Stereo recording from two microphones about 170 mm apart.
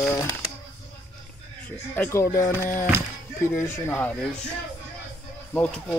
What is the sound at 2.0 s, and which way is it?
Music, 15° left (ahead or behind).